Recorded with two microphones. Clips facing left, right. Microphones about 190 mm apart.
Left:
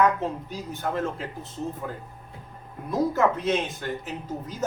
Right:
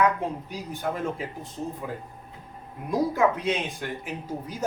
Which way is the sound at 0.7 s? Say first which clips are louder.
Left 1 dB; 15° right (ahead or behind).